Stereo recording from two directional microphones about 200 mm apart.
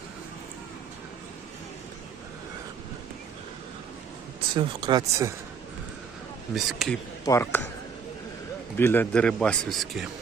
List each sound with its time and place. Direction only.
4.5 s speech: 25° right (ahead or behind)
6.5 s a man's voice: centre (ahead or behind)
7.3 s speech: 15° left (ahead or behind)
8.7 s a man's voice: 10° left (ahead or behind)